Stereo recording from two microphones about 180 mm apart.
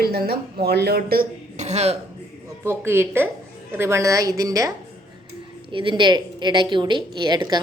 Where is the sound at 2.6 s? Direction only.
15° right (ahead or behind).